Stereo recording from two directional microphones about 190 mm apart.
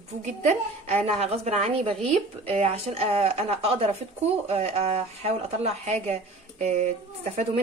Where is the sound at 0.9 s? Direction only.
35° right (ahead or behind).